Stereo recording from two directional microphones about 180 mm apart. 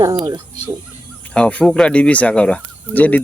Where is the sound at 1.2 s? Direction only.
5° left (ahead or behind).